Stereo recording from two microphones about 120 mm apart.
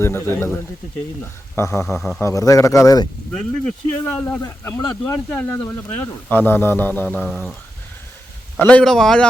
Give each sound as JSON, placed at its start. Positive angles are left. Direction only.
{"t": 0.0, "sound": "speech", "side_deg": 20}
{"t": 2.0, "sound": "speech", "side_deg": 5}
{"t": 2.2, "sound": "speech", "side_deg": 25}
{"t": 3.3, "sound": "speech", "side_deg": 10}
{"t": 8.5, "sound": "speech", "side_deg": 10}